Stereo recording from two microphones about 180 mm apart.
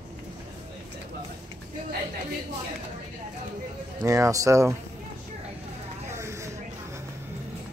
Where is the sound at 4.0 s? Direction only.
20° right (ahead or behind).